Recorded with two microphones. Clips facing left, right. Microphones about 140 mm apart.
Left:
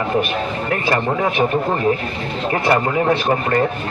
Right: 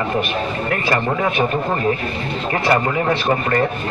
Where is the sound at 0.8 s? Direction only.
25° left (ahead or behind).